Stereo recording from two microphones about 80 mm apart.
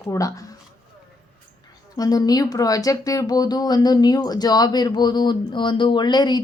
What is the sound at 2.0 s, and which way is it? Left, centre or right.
A woman's voice, left.